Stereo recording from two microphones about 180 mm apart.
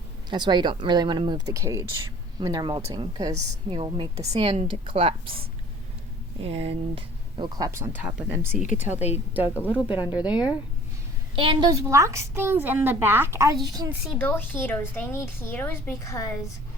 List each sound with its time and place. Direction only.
0.3 s a woman's voice: 25° right (ahead or behind)
6.4 s a woman's voice: 35° right (ahead or behind); by 10.6 s 5° right (ahead or behind)
11.3 s a woman's voice: 25° right (ahead or behind)
14.2 s a woman's voice: 10° left (ahead or behind)